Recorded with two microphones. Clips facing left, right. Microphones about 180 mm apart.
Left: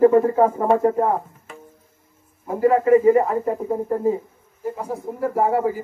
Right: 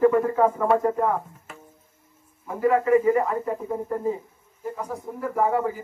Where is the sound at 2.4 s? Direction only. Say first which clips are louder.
Left 4 dB; 35° left (ahead or behind).